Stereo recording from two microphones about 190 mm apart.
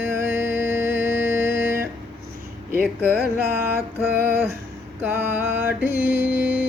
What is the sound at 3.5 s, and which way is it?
Mantra, 10° right (ahead or behind).